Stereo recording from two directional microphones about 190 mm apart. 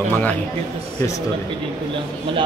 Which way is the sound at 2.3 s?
25° right (ahead or behind).